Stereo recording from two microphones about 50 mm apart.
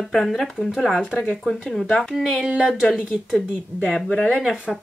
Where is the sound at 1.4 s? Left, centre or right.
Centre.